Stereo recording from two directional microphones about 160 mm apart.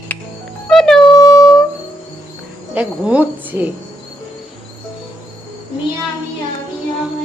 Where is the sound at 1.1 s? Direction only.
20° left (ahead or behind).